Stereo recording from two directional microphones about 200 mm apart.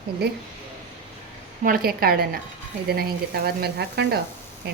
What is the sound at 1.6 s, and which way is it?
Speech, 45° right (ahead or behind).